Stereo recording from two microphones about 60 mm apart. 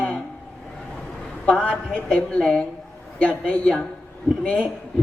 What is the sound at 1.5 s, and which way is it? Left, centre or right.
A man's voice, centre.